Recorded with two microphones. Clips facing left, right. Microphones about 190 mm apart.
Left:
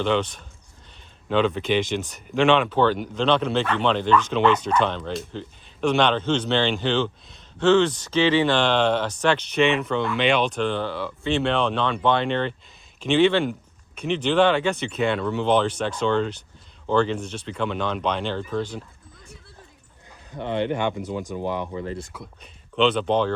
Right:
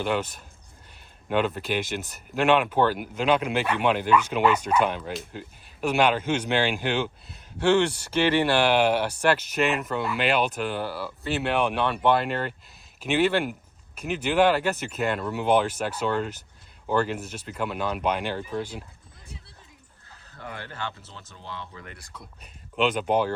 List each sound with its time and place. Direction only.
0.0 s speech: 5° right (ahead or behind)
20.4 s speech: 25° left (ahead or behind)
22.1 s speech: 5° left (ahead or behind)
22.7 s speech: 10° right (ahead or behind)